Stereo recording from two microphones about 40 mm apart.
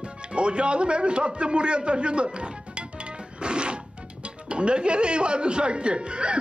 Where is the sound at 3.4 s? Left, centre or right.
Right.